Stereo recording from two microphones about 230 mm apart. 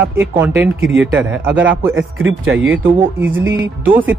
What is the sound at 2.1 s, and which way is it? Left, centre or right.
Speech, right.